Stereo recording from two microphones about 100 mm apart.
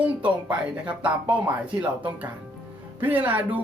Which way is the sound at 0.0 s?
15° right (ahead or behind).